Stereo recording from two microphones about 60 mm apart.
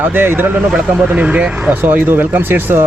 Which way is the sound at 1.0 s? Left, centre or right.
Centre.